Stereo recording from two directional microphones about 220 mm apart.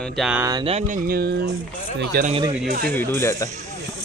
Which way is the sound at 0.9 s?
40° right (ahead or behind).